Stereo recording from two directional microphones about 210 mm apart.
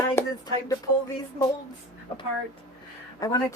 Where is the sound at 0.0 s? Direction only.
15° left (ahead or behind).